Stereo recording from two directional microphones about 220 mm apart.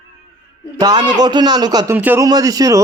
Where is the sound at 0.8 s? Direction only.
20° right (ahead or behind).